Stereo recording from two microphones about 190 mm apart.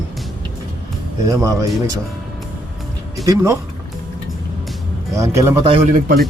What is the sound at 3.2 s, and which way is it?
Speech, 20° right (ahead or behind).